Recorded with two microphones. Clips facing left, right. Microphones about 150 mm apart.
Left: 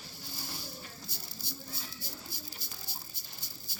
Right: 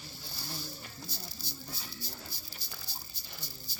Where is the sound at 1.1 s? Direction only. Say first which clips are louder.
Right 1 dB; 55° left (ahead or behind).